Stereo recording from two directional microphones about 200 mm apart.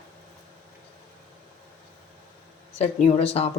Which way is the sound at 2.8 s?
30° left (ahead or behind).